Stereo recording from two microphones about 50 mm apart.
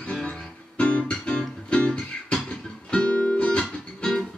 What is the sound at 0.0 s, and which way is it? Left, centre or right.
Music, centre.